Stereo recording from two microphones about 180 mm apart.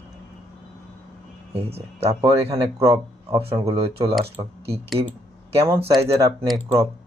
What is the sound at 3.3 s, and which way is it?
Speech, 30° right (ahead or behind).